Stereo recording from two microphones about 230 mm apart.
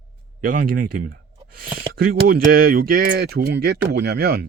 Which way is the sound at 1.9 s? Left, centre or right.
Right.